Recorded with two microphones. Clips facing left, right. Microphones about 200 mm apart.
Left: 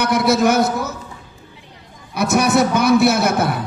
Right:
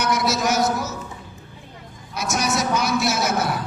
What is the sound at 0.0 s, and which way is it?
Speech, 60° left (ahead or behind).